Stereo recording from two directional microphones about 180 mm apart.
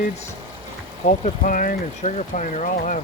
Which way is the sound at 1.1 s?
45° left (ahead or behind).